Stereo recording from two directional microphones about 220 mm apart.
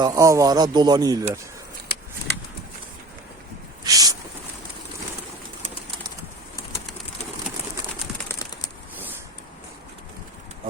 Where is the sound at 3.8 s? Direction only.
15° right (ahead or behind).